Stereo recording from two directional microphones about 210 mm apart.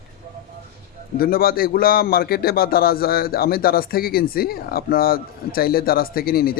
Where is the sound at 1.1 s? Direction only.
45° left (ahead or behind).